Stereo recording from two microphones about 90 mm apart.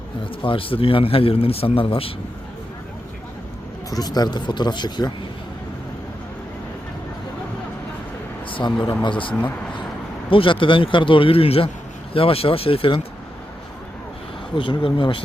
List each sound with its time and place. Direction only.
0.4 s speech: 80° left
3.8 s speech: 45° left (ahead or behind)
8.4 s a sound: 75° left (ahead or behind)
9.0 s a man's voice: 70° left (ahead or behind); by 13.0 s 90° left
14.5 s a man's voice: 70° left (ahead or behind)